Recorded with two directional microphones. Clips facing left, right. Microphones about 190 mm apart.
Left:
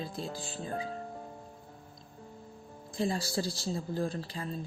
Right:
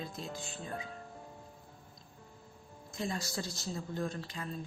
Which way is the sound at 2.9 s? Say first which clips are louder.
Left 6 dB; 30° left (ahead or behind).